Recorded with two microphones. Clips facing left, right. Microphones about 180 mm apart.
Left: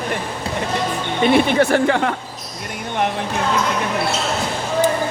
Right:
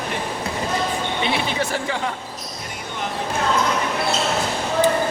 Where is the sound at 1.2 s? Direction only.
55° left (ahead or behind).